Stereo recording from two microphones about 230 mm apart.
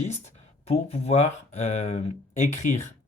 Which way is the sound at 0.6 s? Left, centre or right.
Left.